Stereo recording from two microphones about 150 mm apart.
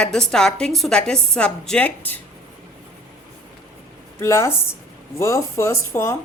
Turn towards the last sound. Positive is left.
turn(degrees=15)  # may be behind; listen again after turning